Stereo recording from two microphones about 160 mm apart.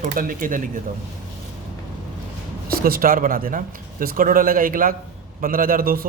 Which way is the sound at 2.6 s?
65° right (ahead or behind).